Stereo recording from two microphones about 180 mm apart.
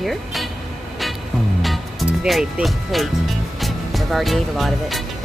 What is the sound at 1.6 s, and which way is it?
Music, centre (ahead or behind).